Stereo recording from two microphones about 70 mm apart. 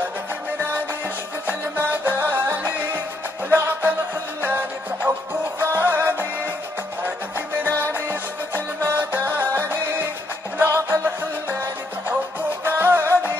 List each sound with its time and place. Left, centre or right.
0.6 s music: right
7.6 s music: left
7.9 s music: right